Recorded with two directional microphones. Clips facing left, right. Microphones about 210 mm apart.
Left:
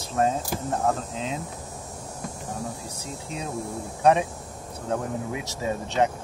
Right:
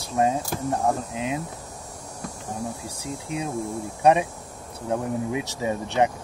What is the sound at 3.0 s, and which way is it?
Speech, 15° right (ahead or behind).